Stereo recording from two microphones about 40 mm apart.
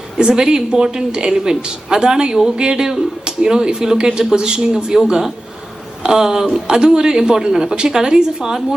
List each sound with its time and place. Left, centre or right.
0.2 s a woman's voice: centre